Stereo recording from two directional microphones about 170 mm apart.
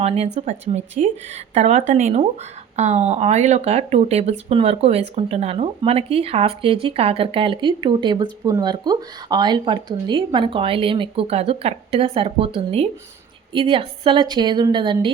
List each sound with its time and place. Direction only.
0.0 s a woman's voice: 35° right (ahead or behind)